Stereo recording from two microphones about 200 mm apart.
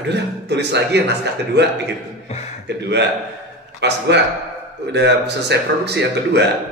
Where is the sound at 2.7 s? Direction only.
60° right (ahead or behind).